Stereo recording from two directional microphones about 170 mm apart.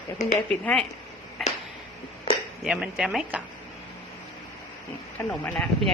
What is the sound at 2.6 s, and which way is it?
Speech, 5° right (ahead or behind).